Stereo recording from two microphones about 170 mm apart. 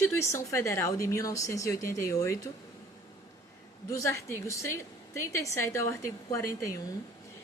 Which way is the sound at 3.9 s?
15° left (ahead or behind).